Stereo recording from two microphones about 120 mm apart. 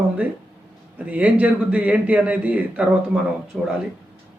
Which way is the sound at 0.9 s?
10° right (ahead or behind).